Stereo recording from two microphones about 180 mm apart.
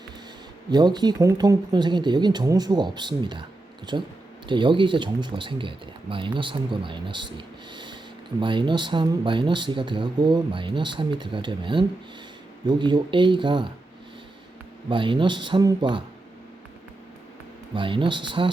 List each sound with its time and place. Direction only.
0.7 s speech: 25° right (ahead or behind)
14.8 s speech: 25° right (ahead or behind)
17.7 s speech: 25° right (ahead or behind)